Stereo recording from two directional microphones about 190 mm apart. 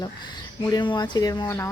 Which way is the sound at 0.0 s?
25° left (ahead or behind).